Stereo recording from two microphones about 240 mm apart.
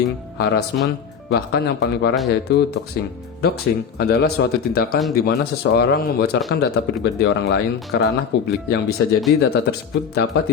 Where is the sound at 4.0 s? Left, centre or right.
Left.